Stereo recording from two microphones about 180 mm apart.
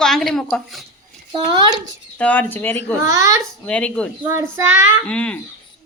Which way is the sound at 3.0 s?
20° right (ahead or behind).